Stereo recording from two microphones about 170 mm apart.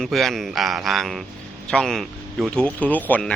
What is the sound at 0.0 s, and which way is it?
A man's voice, centre (ahead or behind).